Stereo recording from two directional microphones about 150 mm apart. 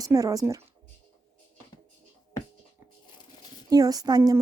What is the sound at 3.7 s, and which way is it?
Speech, 25° right (ahead or behind).